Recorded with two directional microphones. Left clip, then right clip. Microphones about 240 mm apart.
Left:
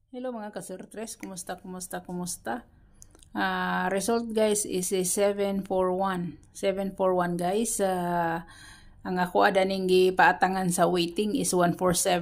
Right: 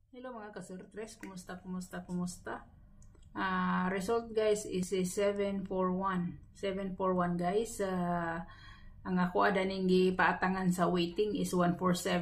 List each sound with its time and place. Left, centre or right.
0.1 s speech: left